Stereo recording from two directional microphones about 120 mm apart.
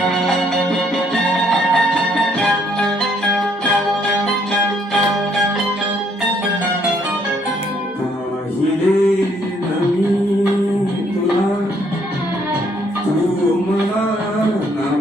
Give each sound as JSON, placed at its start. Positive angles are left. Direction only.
{"t": 1.1, "sound": "music", "side_deg": 5}